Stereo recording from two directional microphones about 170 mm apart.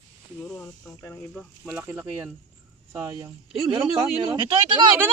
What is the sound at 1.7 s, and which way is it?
Speech, 10° right (ahead or behind).